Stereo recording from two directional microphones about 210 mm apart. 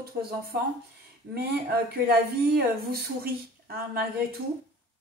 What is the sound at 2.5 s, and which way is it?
Speech, 45° right (ahead or behind).